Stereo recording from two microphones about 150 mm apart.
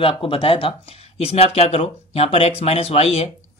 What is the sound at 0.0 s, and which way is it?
Speech, 35° left (ahead or behind).